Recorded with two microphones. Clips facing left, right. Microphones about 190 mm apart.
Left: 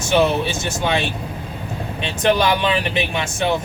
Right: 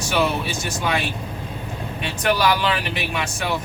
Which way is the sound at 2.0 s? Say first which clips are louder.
Left 3 dB; 25° left (ahead or behind).